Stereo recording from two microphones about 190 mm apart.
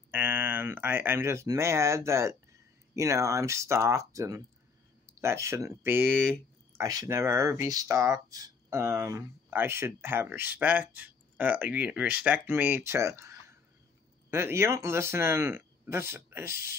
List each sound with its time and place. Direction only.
0.1 s speech: 10° right (ahead or behind)
6.0 s speech: 5° left (ahead or behind)
6.8 s speech: 15° right (ahead or behind)